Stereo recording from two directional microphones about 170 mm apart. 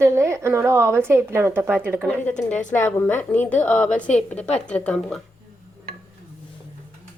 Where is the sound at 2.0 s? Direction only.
5° left (ahead or behind).